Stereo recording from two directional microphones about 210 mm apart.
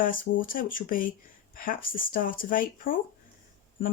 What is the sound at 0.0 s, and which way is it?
Speech, 40° left (ahead or behind).